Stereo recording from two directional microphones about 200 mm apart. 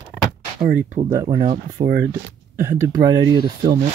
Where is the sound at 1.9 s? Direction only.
55° right (ahead or behind).